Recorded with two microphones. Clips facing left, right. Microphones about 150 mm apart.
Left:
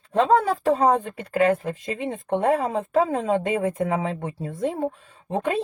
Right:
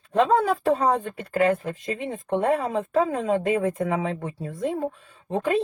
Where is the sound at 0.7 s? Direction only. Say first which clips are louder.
Left 2 dB; 35° left (ahead or behind).